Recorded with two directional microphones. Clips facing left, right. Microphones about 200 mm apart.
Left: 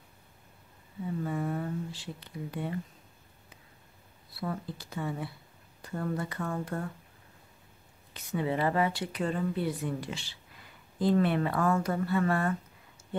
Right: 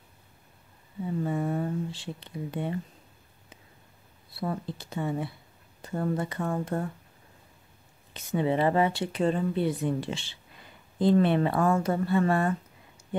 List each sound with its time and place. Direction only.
1.2 s a sound: 25° right (ahead or behind)
4.4 s a woman's voice: 25° right (ahead or behind)
8.1 s a woman's voice: 25° right (ahead or behind)